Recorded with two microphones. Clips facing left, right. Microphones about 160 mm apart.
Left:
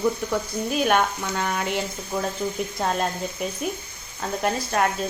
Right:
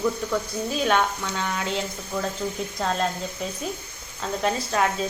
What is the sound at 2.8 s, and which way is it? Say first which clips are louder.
Speech: even; 10° left (ahead or behind).